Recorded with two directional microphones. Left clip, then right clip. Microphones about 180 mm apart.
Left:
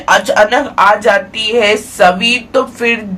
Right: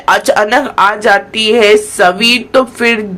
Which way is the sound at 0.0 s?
40° right (ahead or behind).